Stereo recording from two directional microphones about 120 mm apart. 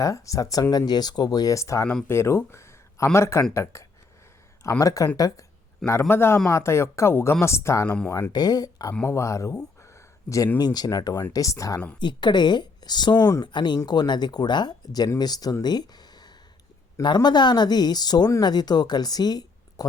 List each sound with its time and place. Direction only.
0.0 s a man's voice: 30° left (ahead or behind)
7.9 s speech: 10° left (ahead or behind)
8.3 s speech: 35° left (ahead or behind)
9.8 s a sound: 25° left (ahead or behind)
10.6 s speech: 35° left (ahead or behind)
11.9 s speech: 40° left (ahead or behind)